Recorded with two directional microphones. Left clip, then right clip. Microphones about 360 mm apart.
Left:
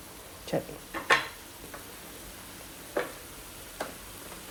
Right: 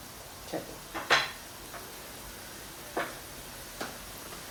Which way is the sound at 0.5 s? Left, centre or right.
Left.